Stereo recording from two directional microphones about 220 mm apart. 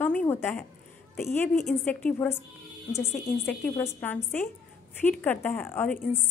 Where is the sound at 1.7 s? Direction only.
5° left (ahead or behind).